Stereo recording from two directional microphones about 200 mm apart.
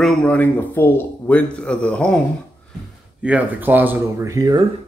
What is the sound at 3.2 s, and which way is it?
Speech, 5° right (ahead or behind).